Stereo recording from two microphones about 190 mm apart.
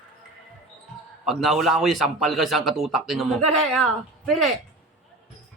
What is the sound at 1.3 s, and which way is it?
A man's voice, centre (ahead or behind).